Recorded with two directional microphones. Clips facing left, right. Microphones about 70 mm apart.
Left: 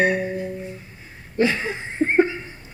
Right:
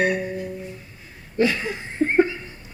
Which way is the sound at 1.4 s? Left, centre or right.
Left.